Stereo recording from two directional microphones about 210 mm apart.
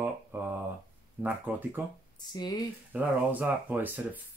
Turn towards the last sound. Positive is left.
turn(degrees=-10)  # may be behind; listen again after turning